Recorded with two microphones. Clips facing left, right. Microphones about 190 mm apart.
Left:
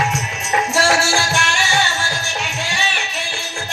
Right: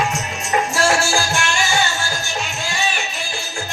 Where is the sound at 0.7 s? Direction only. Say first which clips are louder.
Left 2 dB; 80° left.